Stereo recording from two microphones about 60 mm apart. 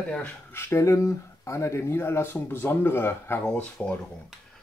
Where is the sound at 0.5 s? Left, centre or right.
Left.